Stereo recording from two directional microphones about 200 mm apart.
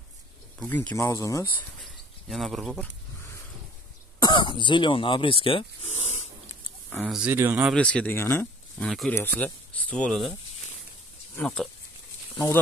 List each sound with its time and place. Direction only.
0.6 s speech: 10° left (ahead or behind)
1.8 s a sound: centre (ahead or behind)
4.2 s speech: 25° left (ahead or behind)
6.9 s speech: centre (ahead or behind)
7.7 s speech: 5° left (ahead or behind)
8.8 s speech: centre (ahead or behind)
11.3 s speech: centre (ahead or behind)